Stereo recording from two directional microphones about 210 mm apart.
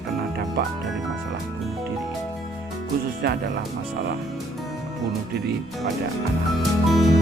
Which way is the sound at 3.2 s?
50° right (ahead or behind).